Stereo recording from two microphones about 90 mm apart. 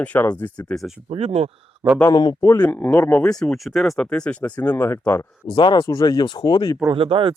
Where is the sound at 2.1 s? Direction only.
50° left (ahead or behind).